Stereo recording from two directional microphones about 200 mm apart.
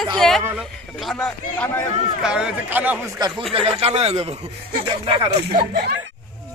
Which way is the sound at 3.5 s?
30° right (ahead or behind).